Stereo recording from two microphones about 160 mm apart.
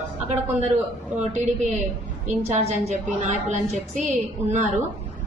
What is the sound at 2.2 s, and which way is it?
A woman's voice, 45° right (ahead or behind).